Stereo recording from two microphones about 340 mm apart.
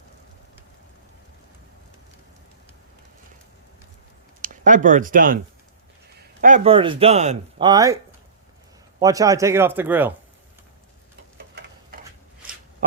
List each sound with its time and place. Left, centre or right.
4.4 s speech: right
9.0 s speech: centre
11.3 s tick-tock: right